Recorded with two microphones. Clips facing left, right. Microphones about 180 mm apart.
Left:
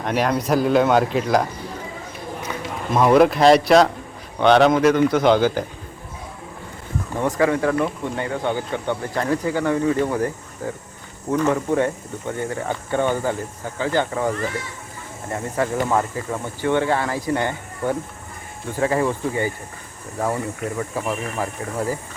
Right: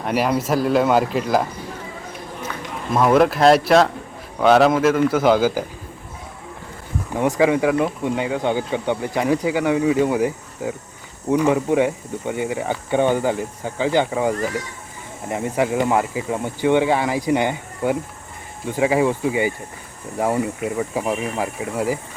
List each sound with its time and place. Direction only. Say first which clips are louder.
0.0 s speech: right 1 dB; 5° right (ahead or behind)
2.9 s speech: left 1 dB; centre (ahead or behind)
7.1 s speech: right 2 dB; 15° right (ahead or behind)